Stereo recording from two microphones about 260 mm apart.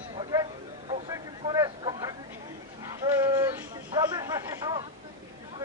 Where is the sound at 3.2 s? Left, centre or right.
Centre.